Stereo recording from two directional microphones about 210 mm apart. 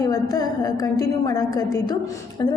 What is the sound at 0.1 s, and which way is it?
A woman's voice, 15° left (ahead or behind).